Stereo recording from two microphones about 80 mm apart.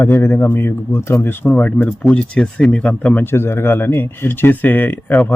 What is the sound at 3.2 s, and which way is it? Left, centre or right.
Speech, left.